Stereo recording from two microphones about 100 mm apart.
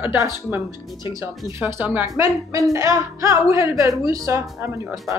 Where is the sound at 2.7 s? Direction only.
30° right (ahead or behind).